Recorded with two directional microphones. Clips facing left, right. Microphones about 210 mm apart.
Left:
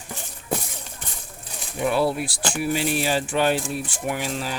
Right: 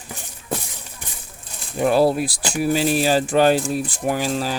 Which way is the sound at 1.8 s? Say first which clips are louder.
Right 5 dB; 40° right (ahead or behind).